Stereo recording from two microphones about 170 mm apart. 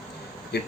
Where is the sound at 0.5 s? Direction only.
70° left (ahead or behind).